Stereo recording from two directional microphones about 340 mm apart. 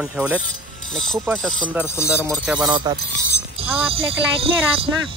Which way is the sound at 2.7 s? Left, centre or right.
Centre.